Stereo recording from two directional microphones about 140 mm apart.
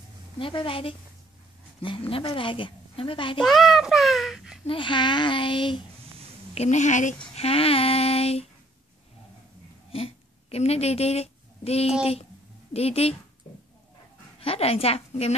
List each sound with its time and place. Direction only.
0.4 s a woman's voice: 40° left (ahead or behind)
3.3 s a child's voice: centre (ahead or behind)
4.6 s a woman's voice: 35° left (ahead or behind)
6.5 s speech: 55° left (ahead or behind)
9.9 s a woman's voice: 45° left (ahead or behind)
14.4 s a woman's voice: 45° left (ahead or behind)